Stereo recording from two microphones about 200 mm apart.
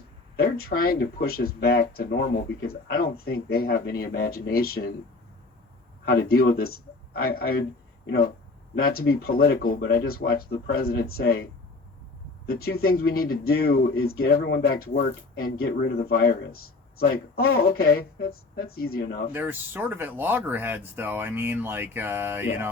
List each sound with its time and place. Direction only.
0.3 s speech: 50° left (ahead or behind)
6.1 s speech: 50° left (ahead or behind)
8.7 s speech: 50° left (ahead or behind)
12.6 s speech: 50° left (ahead or behind)
17.6 s speech: 50° left (ahead or behind)
19.3 s speech: 10° right (ahead or behind)